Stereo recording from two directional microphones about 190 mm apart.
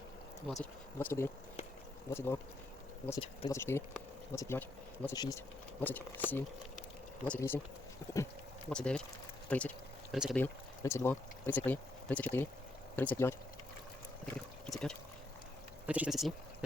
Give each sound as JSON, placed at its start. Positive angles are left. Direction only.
{"t": 0.6, "sound": "speech", "side_deg": 10}
{"t": 3.5, "sound": "speech", "side_deg": 15}
{"t": 5.8, "sound": "speech", "side_deg": 10}
{"t": 8.7, "sound": "speech", "side_deg": 5}
{"t": 9.5, "sound": "a sound", "side_deg": 5}
{"t": 10.3, "sound": "speech", "side_deg": 15}
{"t": 14.3, "sound": "a sound", "side_deg": 5}
{"t": 15.9, "sound": "speech", "side_deg": -5}